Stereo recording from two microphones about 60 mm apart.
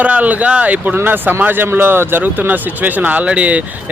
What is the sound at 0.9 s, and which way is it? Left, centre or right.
Speech, right.